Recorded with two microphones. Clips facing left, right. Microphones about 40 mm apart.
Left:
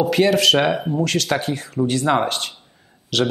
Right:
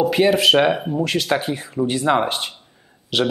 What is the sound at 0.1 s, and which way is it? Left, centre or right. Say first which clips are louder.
A man's voice: left 1 dB; centre.